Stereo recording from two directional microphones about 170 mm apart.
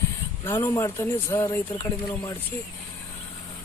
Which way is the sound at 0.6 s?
15° left (ahead or behind).